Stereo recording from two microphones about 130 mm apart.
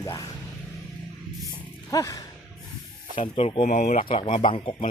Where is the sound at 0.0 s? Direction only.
25° left (ahead or behind).